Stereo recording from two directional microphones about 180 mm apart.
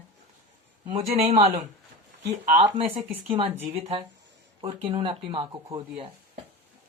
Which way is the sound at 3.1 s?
30° right (ahead or behind).